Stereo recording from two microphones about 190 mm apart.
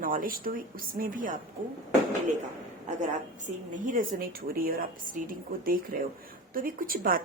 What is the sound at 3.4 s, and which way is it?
A woman's voice, 40° right (ahead or behind).